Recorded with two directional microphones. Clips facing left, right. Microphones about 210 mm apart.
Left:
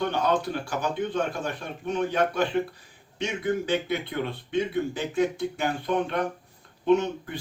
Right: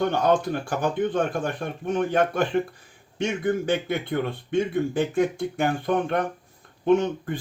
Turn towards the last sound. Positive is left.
turn(degrees=-50)  # may be behind; listen again after turning